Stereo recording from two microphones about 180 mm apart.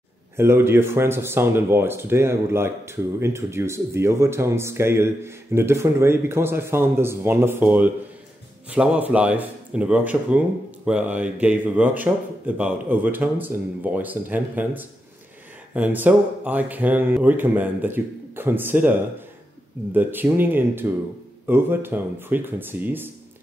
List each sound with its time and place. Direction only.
0.4 s speech: 15° right (ahead or behind)